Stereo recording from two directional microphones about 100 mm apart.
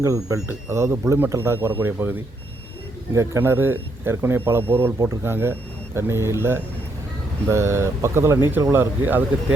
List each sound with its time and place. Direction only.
0.0 s speech: 30° right (ahead or behind)